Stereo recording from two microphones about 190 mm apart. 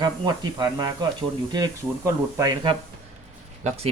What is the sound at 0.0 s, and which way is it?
Speech, 20° right (ahead or behind).